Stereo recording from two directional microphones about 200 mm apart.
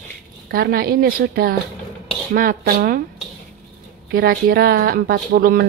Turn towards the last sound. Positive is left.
turn(degrees=-45)  # may be behind; listen again after turning